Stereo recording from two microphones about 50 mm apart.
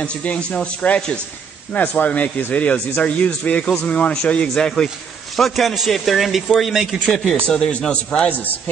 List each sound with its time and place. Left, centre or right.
0.0 s speech: left
4.8 s a man's voice: centre
7.3 s speech: centre